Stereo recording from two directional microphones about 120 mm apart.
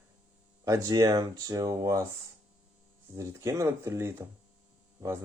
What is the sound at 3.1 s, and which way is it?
Speech, 25° right (ahead or behind).